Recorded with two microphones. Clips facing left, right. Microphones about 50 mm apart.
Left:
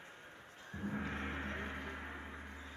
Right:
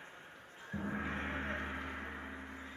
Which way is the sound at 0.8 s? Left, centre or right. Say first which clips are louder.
Right 1 dB; centre.